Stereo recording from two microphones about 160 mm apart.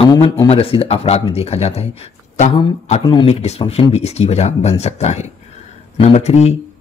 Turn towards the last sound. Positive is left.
turn(degrees=45)  # may be behind; listen again after turning